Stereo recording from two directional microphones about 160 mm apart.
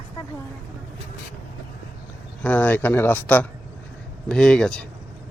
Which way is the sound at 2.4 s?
10° left (ahead or behind).